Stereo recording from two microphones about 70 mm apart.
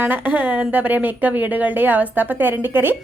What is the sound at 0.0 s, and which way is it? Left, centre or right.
Speech, right.